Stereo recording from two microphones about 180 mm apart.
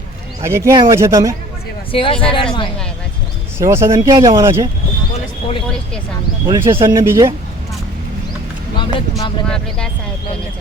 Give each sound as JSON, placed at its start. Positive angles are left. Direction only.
{"t": 0.4, "sound": "speech", "side_deg": -15}
{"t": 1.9, "sound": "speech", "side_deg": 30}
{"t": 3.6, "sound": "speech", "side_deg": -15}
{"t": 6.5, "sound": "speech", "side_deg": -15}
{"t": 8.8, "sound": "a sound", "side_deg": 25}
{"t": 9.5, "sound": "speech", "side_deg": 5}